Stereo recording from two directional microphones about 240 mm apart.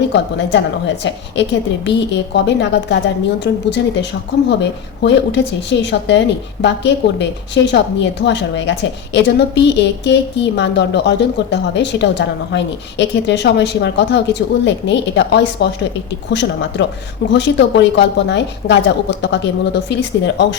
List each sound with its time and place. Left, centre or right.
0.1 s a woman's voice: left
5.0 s a woman's voice: left